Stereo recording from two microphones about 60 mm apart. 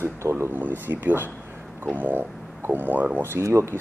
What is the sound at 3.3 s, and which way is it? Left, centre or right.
Speech, right.